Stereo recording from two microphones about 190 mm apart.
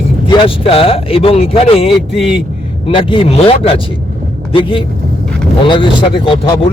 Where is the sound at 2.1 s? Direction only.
5° right (ahead or behind).